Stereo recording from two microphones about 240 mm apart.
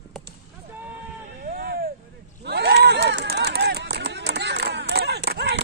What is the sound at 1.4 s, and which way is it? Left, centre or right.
Vehicle, right.